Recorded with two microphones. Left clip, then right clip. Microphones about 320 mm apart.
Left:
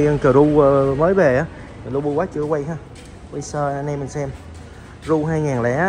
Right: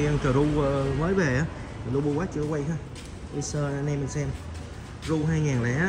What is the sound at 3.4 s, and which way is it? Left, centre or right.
A man's voice, centre.